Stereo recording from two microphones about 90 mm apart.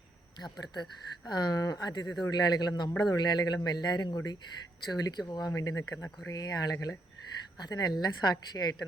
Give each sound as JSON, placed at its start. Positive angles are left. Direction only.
{"t": 0.6, "sound": "a man's voice", "side_deg": 50}
{"t": 5.5, "sound": "a man's voice", "side_deg": 40}